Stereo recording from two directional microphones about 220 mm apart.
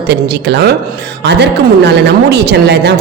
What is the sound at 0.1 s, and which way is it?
A woman's voice, 50° right (ahead or behind).